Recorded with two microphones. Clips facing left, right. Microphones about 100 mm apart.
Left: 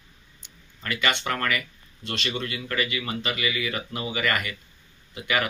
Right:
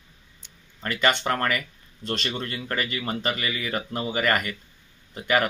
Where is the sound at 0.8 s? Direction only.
40° right (ahead or behind).